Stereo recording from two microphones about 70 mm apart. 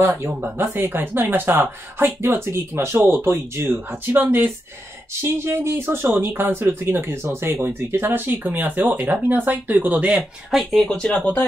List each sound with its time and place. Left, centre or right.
0.0 s speech: right
5.2 s speech: right
10.5 s speech: centre
11.1 s speech: centre